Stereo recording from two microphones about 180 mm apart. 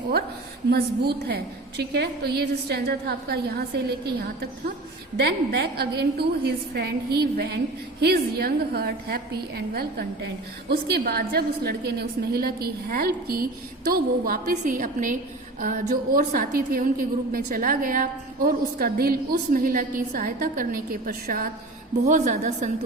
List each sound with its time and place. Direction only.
0.7 s a woman's voice: 65° right (ahead or behind)
22.0 s a woman's voice: 45° right (ahead or behind)